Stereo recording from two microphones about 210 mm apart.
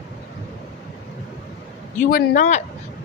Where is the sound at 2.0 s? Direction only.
40° left (ahead or behind).